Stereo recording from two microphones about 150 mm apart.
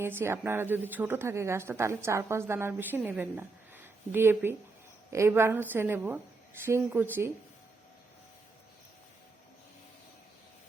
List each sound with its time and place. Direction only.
0.0 s a woman's voice: 15° right (ahead or behind)